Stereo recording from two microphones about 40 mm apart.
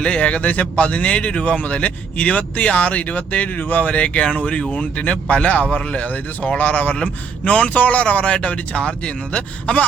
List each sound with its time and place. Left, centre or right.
0.0 s a man's voice: left